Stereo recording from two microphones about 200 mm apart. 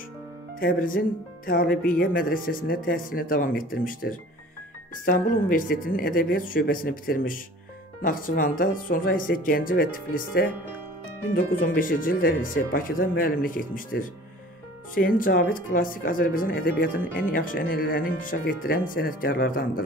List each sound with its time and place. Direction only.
0.6 s speech: 45° left (ahead or behind)